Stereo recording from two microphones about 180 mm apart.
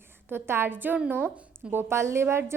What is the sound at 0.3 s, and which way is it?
A woman's voice, 10° right (ahead or behind).